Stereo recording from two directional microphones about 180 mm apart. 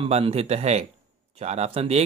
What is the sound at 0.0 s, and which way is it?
Speech, 30° right (ahead or behind).